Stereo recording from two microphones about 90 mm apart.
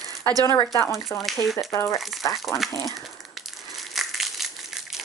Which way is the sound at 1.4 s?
Centre (ahead or behind).